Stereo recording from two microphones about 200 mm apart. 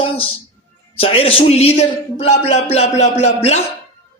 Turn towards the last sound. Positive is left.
turn(degrees=35)  # may be behind; listen again after turning